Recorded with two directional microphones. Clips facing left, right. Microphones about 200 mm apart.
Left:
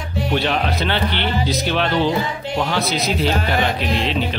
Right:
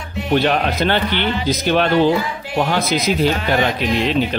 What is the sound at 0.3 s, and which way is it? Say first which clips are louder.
Speech: right 4 dB; 45° right (ahead or behind).